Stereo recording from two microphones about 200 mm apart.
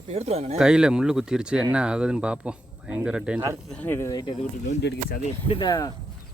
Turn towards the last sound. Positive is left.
turn(degrees=20)  # may be behind; listen again after turning